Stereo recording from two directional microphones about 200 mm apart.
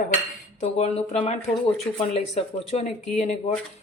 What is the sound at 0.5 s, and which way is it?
Speech, 35° left (ahead or behind).